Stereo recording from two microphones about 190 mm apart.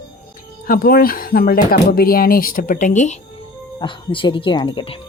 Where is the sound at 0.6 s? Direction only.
50° left (ahead or behind).